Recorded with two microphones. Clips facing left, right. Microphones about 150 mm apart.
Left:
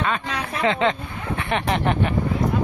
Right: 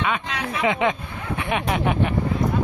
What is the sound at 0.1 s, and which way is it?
Speech, 10° right (ahead or behind).